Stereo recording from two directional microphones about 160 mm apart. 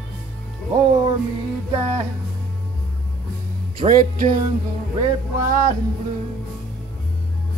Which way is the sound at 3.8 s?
55° right (ahead or behind).